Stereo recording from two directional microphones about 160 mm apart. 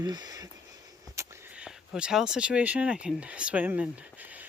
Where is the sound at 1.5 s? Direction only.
5° right (ahead or behind).